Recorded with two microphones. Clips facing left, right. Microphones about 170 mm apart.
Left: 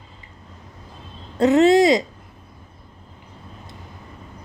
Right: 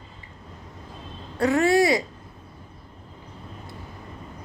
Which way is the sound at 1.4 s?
20° left (ahead or behind).